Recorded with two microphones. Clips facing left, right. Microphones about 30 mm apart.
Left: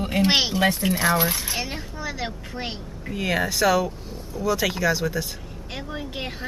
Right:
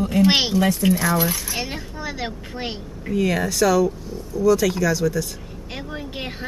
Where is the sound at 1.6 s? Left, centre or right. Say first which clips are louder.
Right 2 dB; centre.